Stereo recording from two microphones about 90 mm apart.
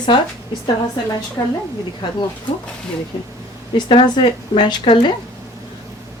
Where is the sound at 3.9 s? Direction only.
65° left (ahead or behind).